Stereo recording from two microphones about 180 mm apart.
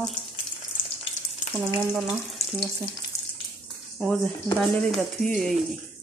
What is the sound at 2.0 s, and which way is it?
Frying, centre (ahead or behind).